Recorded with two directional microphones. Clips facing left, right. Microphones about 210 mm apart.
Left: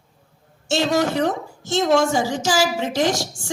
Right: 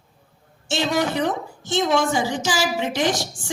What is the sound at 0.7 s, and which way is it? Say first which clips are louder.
A woman's voice: left 3 dB; 40° left (ahead or behind).